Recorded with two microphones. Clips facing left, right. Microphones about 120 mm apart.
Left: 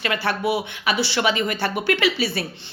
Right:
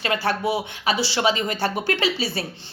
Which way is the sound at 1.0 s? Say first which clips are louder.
Even; 30° right (ahead or behind).